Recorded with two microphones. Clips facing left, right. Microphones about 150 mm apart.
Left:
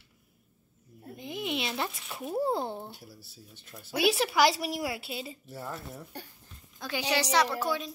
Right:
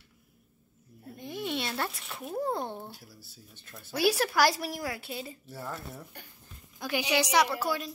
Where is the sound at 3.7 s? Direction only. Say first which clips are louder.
Even; 5° left (ahead or behind).